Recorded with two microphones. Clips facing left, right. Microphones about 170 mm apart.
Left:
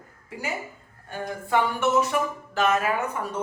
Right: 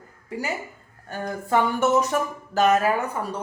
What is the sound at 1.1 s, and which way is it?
Speech, 40° right (ahead or behind).